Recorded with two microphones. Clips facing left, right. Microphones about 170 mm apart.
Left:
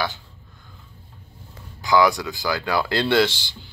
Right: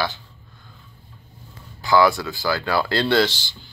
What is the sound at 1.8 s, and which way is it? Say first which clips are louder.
Speech: right 1 dB; 15° left (ahead or behind).